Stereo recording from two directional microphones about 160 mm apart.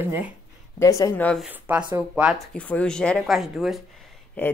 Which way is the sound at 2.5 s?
10° left (ahead or behind).